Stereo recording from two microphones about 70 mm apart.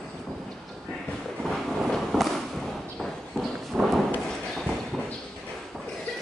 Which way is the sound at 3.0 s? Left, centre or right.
Centre.